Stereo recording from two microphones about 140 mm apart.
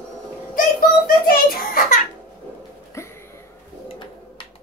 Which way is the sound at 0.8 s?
90° left.